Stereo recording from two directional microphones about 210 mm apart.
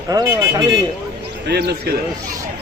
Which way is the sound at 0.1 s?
15° right (ahead or behind).